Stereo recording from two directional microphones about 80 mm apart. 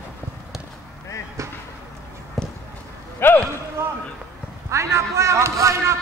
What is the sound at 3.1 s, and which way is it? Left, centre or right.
Speech, left.